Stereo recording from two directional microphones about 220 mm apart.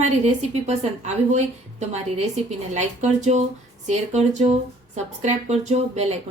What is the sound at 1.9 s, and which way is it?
A woman's voice, 30° right (ahead or behind).